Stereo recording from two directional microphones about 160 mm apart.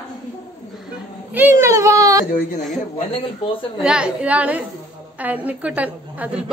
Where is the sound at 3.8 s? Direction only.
5° right (ahead or behind).